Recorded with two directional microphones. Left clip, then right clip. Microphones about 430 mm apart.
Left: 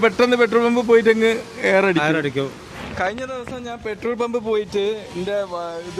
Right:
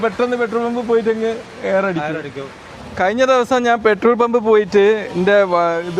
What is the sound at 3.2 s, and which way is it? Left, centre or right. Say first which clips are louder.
Speech: right 16 dB; right.